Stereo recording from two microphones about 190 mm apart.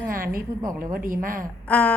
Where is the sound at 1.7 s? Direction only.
5° left (ahead or behind).